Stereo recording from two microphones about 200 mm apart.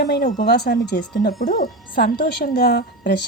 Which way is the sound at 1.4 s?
40° left (ahead or behind).